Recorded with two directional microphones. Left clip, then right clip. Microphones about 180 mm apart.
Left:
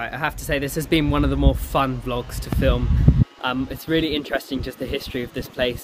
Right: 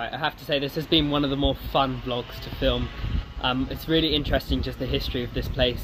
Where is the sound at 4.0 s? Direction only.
45° left (ahead or behind).